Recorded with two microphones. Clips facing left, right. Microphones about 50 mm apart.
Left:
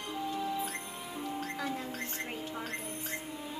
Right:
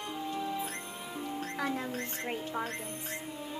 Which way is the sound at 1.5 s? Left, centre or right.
Right.